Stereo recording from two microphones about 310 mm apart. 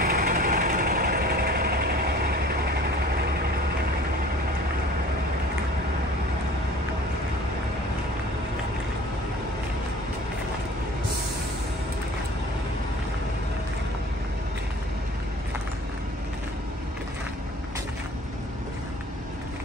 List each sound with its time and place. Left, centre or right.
0.0 s vehicle: right